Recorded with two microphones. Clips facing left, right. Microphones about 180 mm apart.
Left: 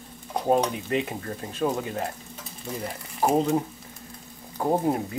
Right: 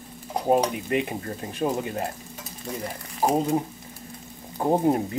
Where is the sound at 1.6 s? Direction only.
20° right (ahead or behind).